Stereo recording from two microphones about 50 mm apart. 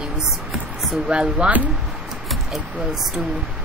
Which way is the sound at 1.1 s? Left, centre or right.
Right.